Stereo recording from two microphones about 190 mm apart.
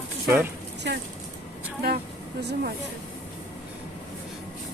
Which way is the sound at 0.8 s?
65° right (ahead or behind).